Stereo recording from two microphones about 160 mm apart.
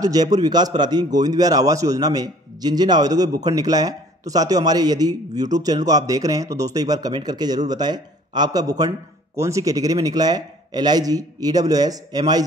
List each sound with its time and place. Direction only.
0.0 s a man's voice: 25° right (ahead or behind)